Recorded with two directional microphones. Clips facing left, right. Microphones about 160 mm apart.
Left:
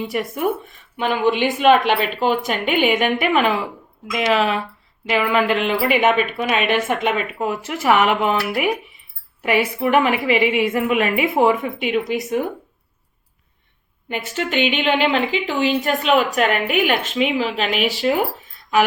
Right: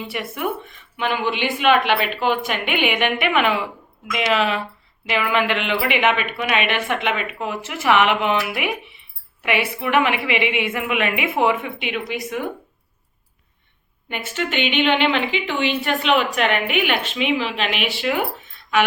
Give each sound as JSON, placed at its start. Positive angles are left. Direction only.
{"t": 0.1, "sound": "a woman's voice", "side_deg": 40}
{"t": 14.1, "sound": "a woman's voice", "side_deg": 35}